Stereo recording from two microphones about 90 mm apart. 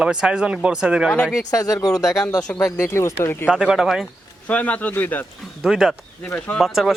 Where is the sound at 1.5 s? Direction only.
40° left (ahead or behind).